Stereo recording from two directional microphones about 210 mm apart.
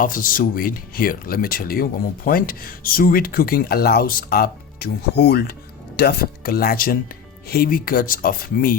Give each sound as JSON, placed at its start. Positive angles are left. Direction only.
{"t": 0.0, "sound": "speech", "side_deg": 40}